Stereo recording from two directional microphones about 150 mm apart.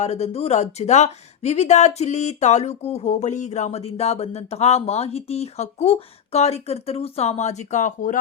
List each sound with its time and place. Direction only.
0.0 s speech: 45° left (ahead or behind)